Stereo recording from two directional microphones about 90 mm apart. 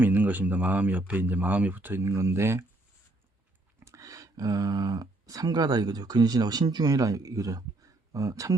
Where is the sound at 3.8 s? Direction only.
35° right (ahead or behind).